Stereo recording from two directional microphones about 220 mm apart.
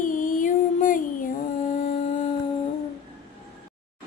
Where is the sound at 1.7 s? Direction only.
35° left (ahead or behind).